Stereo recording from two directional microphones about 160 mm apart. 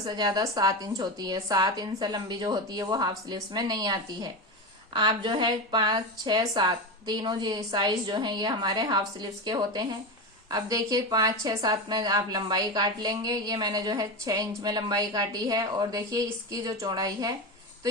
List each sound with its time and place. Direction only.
0.0 s a woman's voice: 25° right (ahead or behind)